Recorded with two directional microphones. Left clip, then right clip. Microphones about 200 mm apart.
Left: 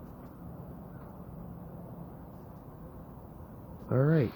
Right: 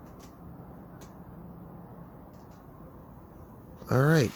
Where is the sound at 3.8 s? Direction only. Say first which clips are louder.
Right 4 dB; 50° right (ahead or behind).